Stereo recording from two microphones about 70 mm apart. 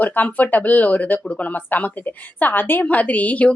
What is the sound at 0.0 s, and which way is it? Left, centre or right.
A woman's voice, left.